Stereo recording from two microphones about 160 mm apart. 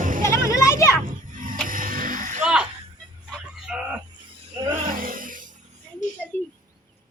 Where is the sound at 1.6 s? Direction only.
60° right (ahead or behind).